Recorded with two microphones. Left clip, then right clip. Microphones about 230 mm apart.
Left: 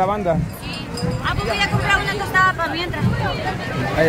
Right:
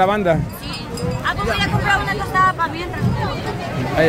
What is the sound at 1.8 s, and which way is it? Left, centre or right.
Speech, centre.